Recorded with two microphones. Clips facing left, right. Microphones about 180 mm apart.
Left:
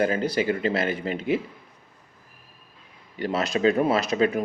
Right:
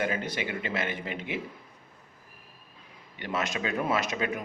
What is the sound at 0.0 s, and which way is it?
Speech, 35° left (ahead or behind).